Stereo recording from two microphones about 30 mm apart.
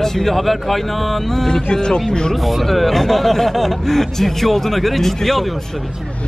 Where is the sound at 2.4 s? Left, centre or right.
Centre.